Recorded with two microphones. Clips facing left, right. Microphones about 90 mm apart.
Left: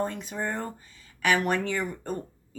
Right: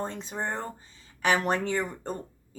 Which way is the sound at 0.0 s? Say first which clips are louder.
Left 2 dB; 25° right (ahead or behind).